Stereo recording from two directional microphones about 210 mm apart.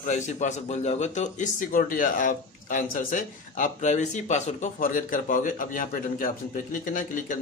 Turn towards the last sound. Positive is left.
turn(degrees=40)  # may be behind; listen again after turning